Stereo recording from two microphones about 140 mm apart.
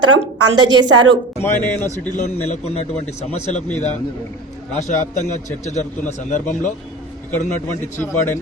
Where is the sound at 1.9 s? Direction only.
55° left (ahead or behind).